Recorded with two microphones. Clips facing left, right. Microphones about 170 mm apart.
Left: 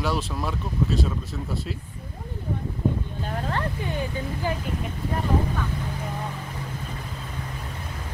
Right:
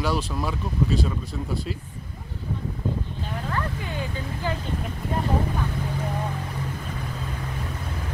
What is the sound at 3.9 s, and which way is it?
Speech, 15° left (ahead or behind).